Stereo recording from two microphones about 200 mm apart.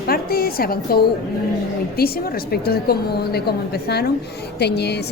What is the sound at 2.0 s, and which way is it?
A woman's voice, 50° left (ahead or behind).